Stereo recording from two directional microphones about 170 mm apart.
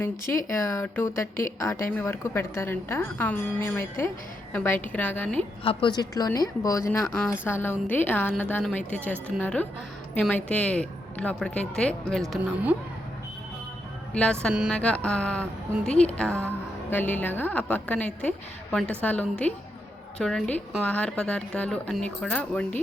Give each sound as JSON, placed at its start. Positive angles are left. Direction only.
{"t": 0.0, "sound": "a woman's voice", "side_deg": 15}
{"t": 5.6, "sound": "a woman's voice", "side_deg": 25}
{"t": 14.1, "sound": "a woman's voice", "side_deg": 5}
{"t": 14.5, "sound": "speech", "side_deg": -5}
{"t": 14.8, "sound": "a woman's voice", "side_deg": 5}